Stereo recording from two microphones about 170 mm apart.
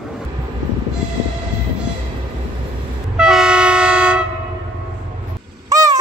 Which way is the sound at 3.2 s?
5° right (ahead or behind).